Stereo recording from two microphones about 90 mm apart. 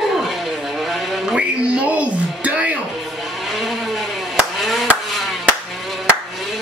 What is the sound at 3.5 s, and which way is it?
Chop, centre (ahead or behind).